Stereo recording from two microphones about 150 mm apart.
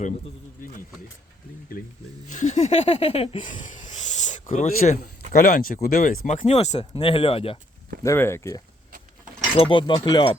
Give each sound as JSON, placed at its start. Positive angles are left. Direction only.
{"t": 2.2, "sound": "speech", "side_deg": 55}
{"t": 3.4, "sound": "a sound", "side_deg": 60}
{"t": 5.3, "sound": "speech", "side_deg": 80}
{"t": 8.0, "sound": "speech", "side_deg": 15}
{"t": 9.6, "sound": "speech", "side_deg": 35}